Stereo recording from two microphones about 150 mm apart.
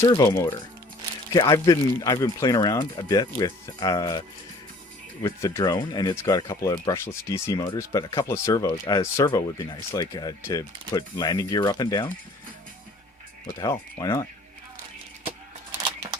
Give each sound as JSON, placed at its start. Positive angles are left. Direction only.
{"t": 0.0, "sound": "speech", "side_deg": 25}
{"t": 5.2, "sound": "speech", "side_deg": 20}
{"t": 13.6, "sound": "speech", "side_deg": 25}